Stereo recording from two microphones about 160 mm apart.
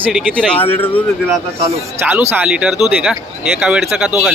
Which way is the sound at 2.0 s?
10° right (ahead or behind).